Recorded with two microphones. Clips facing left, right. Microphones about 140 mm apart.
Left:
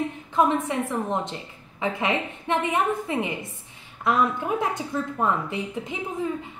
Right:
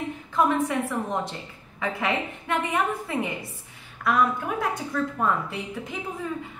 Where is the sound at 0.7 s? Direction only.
25° left (ahead or behind).